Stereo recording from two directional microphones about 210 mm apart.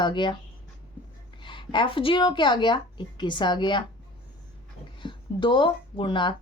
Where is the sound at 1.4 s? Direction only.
20° left (ahead or behind).